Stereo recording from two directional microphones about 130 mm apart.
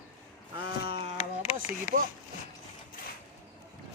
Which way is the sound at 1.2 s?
55° left (ahead or behind).